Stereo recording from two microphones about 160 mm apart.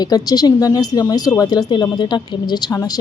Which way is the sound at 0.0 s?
25° left (ahead or behind).